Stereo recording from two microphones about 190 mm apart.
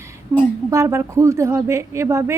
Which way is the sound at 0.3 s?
10° right (ahead or behind).